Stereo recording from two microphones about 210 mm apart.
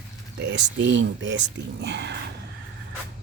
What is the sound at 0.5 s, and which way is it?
Speech, 60° right (ahead or behind).